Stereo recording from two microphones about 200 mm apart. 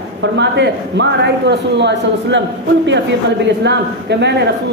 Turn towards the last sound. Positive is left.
turn(degrees=-60)  # may be behind; listen again after turning